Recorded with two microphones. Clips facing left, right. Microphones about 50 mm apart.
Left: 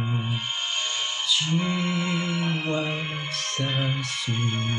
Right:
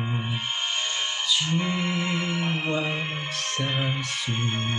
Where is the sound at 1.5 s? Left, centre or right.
Centre.